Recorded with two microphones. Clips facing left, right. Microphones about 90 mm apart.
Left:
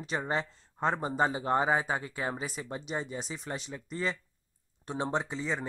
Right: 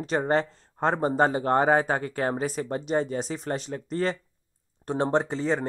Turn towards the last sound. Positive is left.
turn(degrees=-60)  # may be behind; listen again after turning